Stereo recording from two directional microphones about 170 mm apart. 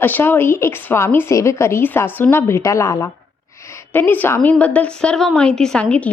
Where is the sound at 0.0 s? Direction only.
10° left (ahead or behind).